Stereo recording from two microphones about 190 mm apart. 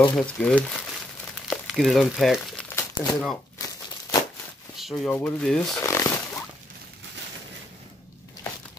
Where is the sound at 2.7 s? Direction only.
15° left (ahead or behind).